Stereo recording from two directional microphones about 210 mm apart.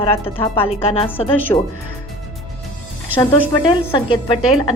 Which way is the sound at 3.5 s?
20° left (ahead or behind).